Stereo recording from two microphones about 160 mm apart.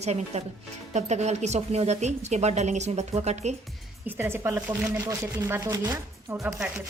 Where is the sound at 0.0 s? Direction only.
45° right (ahead or behind).